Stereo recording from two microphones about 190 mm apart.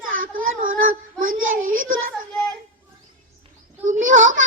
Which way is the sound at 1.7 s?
90° right.